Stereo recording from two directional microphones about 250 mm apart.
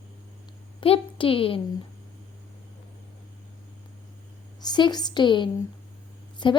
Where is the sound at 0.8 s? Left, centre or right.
Left.